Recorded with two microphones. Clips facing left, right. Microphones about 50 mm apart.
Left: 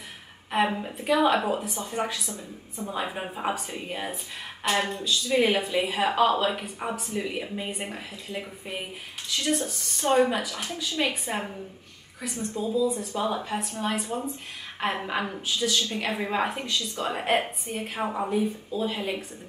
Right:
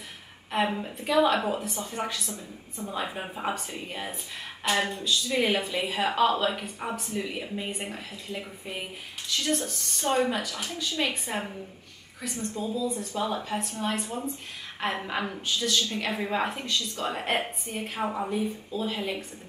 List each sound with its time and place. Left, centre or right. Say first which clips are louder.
0.5 s a woman's voice: left 2 dB; centre